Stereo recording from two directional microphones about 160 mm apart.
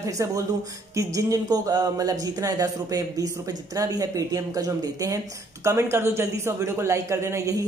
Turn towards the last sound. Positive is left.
turn(degrees=-20)  # may be behind; listen again after turning